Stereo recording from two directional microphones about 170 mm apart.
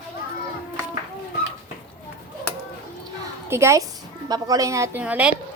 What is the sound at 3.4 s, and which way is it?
A woman's voice, 15° right (ahead or behind).